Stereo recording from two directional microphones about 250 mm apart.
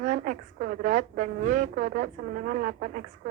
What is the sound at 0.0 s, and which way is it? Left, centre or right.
Speech, right.